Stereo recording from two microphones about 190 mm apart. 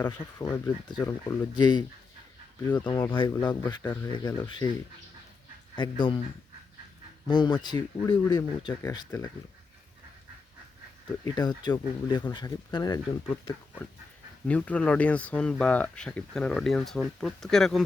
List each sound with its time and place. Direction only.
0.0 s speech: 15° left (ahead or behind)
2.8 s speech: 15° left (ahead or behind)
5.7 s speech: 25° left (ahead or behind)
7.3 s speech: 25° left (ahead or behind)
11.3 s speech: 20° left (ahead or behind)
14.4 s speech: 5° left (ahead or behind)